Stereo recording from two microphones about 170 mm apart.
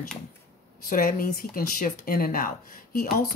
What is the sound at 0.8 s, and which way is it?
Speech, 55° left (ahead or behind).